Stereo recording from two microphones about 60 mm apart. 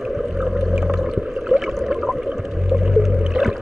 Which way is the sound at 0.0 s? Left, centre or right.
Centre.